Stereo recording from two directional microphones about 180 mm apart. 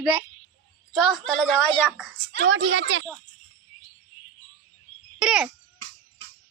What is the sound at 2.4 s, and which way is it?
Speech, 90° right.